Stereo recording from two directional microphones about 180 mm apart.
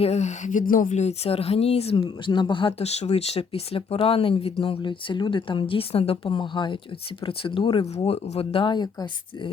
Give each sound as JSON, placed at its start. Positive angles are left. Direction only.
{"t": 0.0, "sound": "speech", "side_deg": 40}